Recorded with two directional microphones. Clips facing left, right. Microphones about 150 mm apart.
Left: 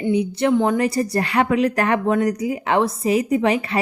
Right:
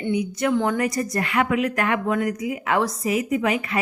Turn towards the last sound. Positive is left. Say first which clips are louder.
# left 4 dB
turn(degrees=35)  # may be behind; listen again after turning